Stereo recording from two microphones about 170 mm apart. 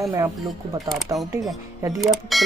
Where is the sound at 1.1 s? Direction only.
20° right (ahead or behind).